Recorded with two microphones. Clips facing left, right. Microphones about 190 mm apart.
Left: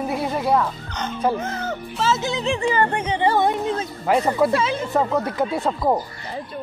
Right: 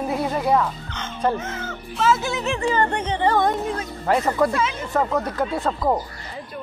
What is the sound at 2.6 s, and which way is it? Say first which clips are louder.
Speech: right 1 dB; 10° left (ahead or behind).